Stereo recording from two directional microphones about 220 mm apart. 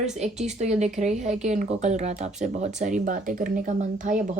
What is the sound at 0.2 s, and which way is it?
Speech, 30° right (ahead or behind).